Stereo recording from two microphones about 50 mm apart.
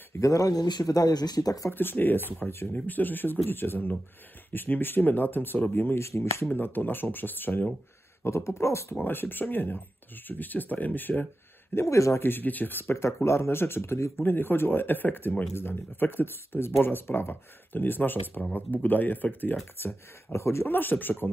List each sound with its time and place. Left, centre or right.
0.1 s speech: left
5.9 s speech: left
6.5 s speech: left
8.2 s speech: left
8.9 s speech: left
11.7 s speech: left
12.2 s speech: left
12.9 s speech: left
14.2 s speech: left
20.3 s speech: left
20.6 s speech: left